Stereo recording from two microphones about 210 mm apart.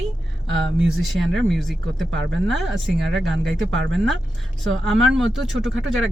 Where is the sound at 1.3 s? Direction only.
Centre (ahead or behind).